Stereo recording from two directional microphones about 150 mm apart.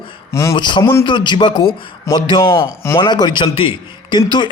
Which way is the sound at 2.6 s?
15° left (ahead or behind).